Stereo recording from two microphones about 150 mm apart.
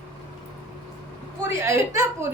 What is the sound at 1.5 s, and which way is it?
Speech, 20° right (ahead or behind).